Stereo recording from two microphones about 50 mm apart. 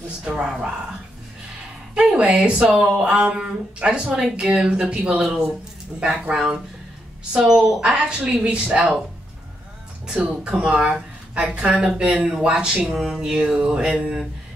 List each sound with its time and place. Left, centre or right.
0.4 s speech: centre
2.0 s speech: right
10.0 s speech: centre
12.0 s speech: right
12.3 s speech: centre
13.7 s speech: right